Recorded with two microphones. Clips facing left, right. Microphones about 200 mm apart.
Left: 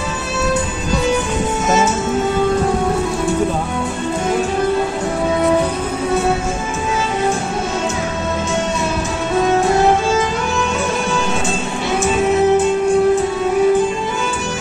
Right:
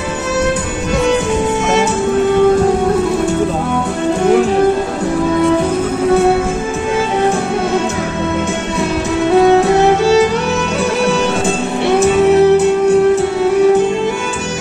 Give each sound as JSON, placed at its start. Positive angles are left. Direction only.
{"t": 12.0, "sound": "music", "side_deg": -65}